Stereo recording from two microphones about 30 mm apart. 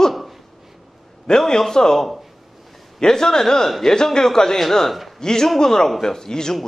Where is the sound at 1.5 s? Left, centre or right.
Centre.